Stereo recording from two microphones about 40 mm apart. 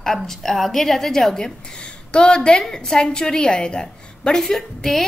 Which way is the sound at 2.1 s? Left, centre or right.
Left.